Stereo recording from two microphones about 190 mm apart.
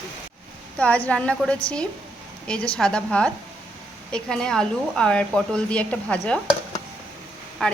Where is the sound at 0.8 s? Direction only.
5° left (ahead or behind).